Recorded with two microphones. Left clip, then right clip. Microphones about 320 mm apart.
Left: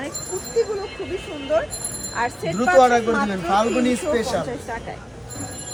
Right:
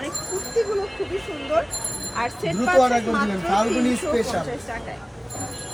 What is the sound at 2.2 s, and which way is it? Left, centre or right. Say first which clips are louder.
Speech: left 2 dB; left.